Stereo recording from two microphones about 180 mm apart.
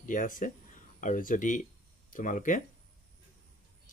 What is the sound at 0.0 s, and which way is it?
Speech, 45° left (ahead or behind).